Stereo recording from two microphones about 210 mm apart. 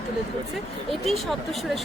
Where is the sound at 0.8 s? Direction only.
Centre (ahead or behind).